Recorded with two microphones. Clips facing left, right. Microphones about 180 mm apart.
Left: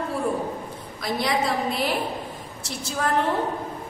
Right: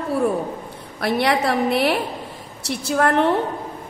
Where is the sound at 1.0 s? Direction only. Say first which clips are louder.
Right 5 dB; 65° right (ahead or behind).